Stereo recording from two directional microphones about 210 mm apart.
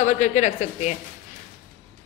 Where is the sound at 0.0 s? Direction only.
35° left (ahead or behind).